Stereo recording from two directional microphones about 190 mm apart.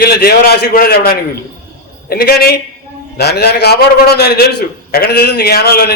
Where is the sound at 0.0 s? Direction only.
55° left (ahead or behind).